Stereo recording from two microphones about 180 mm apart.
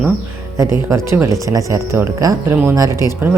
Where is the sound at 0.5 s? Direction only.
15° right (ahead or behind).